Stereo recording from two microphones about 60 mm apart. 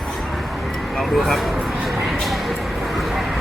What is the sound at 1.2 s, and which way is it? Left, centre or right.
Speech, centre.